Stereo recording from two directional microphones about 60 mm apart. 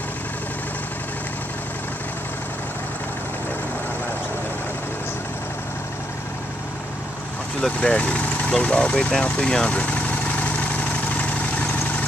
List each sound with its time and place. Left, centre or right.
7.6 s speech: centre
9.2 s vehicle: centre